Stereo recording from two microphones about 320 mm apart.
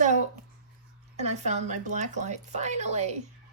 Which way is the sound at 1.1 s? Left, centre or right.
Right.